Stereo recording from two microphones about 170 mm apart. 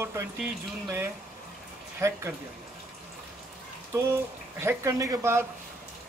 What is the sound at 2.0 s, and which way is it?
Speech, 15° right (ahead or behind).